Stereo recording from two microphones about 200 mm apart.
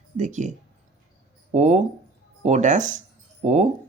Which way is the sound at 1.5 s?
35° right (ahead or behind).